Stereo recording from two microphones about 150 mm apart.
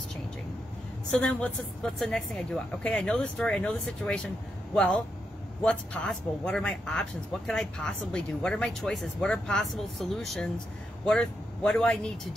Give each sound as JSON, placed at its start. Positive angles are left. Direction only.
{"t": 1.2, "sound": "a woman's voice", "side_deg": 5}